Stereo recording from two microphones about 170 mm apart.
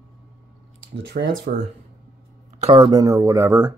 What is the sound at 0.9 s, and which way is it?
Speech, 70° right (ahead or behind).